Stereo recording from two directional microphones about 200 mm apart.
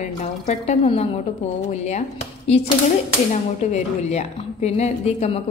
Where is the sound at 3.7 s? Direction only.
35° left (ahead or behind).